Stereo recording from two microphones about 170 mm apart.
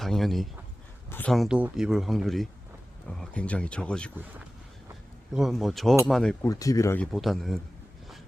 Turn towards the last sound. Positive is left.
turn(degrees=0)  # may be behind; listen again after turning